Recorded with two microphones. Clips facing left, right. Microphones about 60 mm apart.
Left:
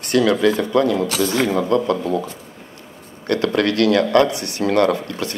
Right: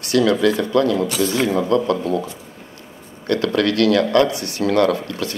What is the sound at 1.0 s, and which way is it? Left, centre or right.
Speech, left.